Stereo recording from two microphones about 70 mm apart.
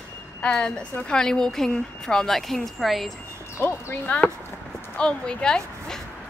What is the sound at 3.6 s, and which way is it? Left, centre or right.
Speech, left.